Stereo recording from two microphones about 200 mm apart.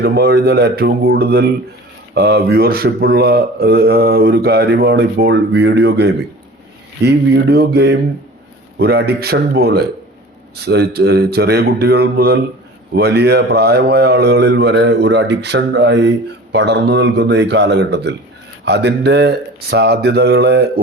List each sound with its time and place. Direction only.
0.0 s speech: 55° right (ahead or behind)